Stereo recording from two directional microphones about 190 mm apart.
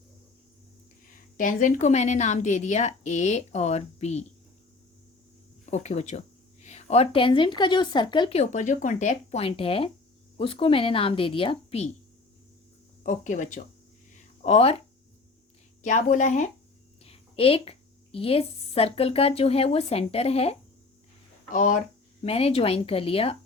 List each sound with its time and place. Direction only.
1.4 s speech: 45° left (ahead or behind)
5.7 s a woman's voice: 35° left (ahead or behind)
13.0 s speech: 40° left (ahead or behind)
15.8 s a woman's voice: 40° left (ahead or behind)
22.2 s speech: 30° left (ahead or behind)